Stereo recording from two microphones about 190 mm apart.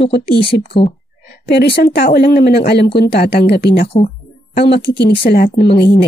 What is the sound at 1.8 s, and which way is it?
Speech, 55° left (ahead or behind).